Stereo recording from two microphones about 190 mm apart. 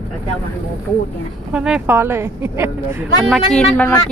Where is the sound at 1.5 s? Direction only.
5° right (ahead or behind).